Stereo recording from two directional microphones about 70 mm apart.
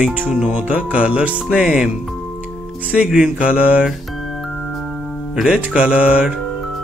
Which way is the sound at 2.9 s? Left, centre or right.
Centre.